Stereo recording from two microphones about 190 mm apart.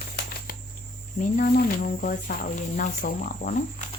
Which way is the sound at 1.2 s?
45° left (ahead or behind).